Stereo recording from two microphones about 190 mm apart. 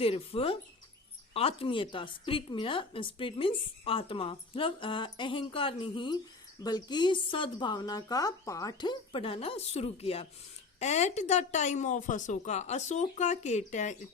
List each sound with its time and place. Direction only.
0.0 s a woman's voice: 30° left (ahead or behind)